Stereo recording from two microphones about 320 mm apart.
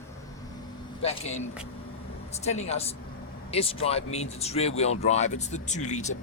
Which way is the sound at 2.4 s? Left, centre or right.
Left.